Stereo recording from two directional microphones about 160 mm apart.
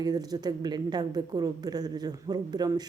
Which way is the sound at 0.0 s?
25° right (ahead or behind).